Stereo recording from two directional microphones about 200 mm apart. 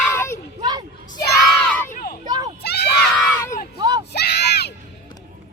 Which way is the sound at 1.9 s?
45° left (ahead or behind).